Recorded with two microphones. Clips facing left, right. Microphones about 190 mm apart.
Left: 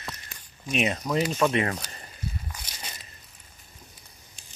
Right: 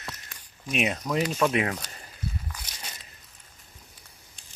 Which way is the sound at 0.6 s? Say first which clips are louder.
Left 1 dB; 5° right (ahead or behind).